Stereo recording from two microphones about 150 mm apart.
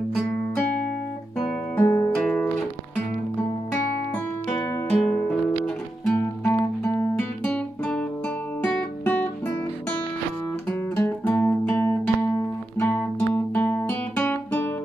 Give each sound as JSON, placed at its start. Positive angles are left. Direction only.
{"t": 1.8, "sound": "music", "side_deg": 15}
{"t": 2.1, "sound": "music", "side_deg": 5}
{"t": 5.0, "sound": "music", "side_deg": 10}
{"t": 6.0, "sound": "guitar", "side_deg": 10}
{"t": 8.6, "sound": "music", "side_deg": 10}
{"t": 10.7, "sound": "music", "side_deg": 15}